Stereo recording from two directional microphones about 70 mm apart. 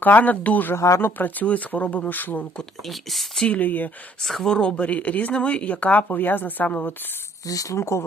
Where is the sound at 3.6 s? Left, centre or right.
Left.